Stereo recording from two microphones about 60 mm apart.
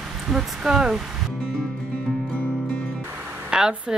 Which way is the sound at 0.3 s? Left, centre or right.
Centre.